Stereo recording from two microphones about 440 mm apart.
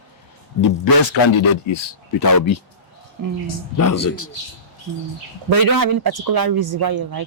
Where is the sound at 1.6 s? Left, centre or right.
Left.